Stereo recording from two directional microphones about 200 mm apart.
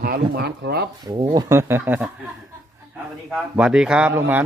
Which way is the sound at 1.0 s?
20° right (ahead or behind).